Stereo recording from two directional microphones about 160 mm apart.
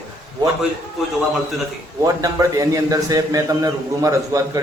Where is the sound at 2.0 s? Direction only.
20° right (ahead or behind).